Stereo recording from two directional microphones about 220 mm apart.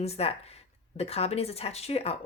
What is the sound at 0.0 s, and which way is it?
Speech, 25° left (ahead or behind).